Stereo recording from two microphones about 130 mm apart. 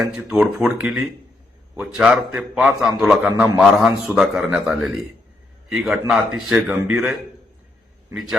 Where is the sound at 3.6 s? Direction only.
5° right (ahead or behind).